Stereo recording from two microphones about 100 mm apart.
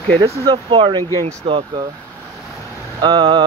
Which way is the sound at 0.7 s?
55° right (ahead or behind).